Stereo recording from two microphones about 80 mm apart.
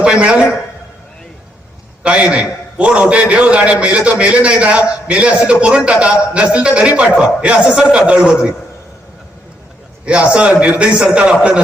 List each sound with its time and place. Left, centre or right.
0.0 s a man's voice: centre
2.0 s a man's voice: centre
10.1 s a man's voice: centre